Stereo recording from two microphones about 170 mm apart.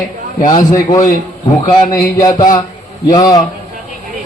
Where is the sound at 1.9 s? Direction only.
20° left (ahead or behind).